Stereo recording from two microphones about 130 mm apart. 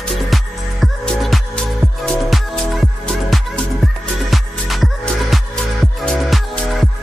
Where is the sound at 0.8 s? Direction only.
Centre (ahead or behind).